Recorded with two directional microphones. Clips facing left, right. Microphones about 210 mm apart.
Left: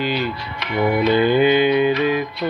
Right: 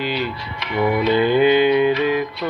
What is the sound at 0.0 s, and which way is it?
Speech, 40° left (ahead or behind).